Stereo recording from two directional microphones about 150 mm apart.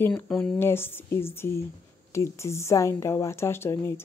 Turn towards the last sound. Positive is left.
turn(degrees=15)  # may be behind; listen again after turning